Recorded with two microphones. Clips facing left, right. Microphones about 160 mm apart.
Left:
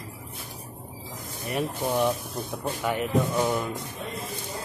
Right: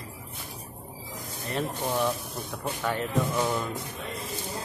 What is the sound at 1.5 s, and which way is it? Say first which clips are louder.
Speech: left 2 dB; 10° left (ahead or behind).